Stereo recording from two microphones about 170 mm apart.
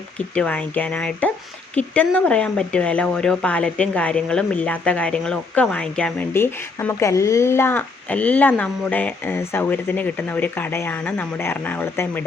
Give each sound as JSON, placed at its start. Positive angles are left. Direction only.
{"t": 0.3, "sound": "a woman's voice", "side_deg": 10}